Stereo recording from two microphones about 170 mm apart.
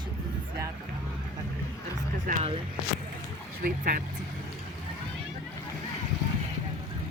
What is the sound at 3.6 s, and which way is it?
Speech, 55° right (ahead or behind).